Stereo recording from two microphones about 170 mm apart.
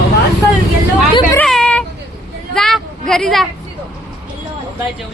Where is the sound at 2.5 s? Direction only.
Centre (ahead or behind).